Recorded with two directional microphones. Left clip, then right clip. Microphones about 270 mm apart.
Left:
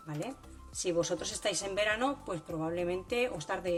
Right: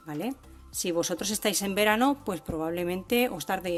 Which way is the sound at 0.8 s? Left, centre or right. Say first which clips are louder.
Right 3 dB; right.